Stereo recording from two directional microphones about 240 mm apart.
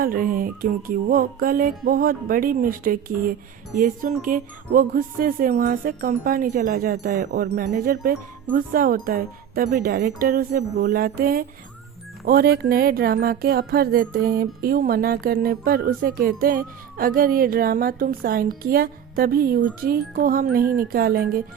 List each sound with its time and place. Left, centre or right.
0.0 s a woman's voice: right